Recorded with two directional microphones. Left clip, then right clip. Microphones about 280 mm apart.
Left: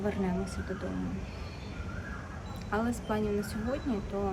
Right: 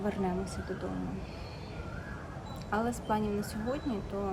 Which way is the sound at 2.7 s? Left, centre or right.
Centre.